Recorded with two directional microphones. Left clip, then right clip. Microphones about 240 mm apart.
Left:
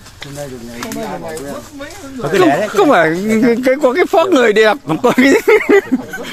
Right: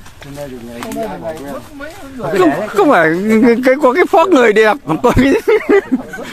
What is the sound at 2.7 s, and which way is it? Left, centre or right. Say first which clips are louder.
Speech: even; centre.